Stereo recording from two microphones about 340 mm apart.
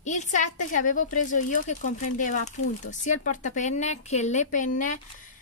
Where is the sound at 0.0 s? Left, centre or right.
Left.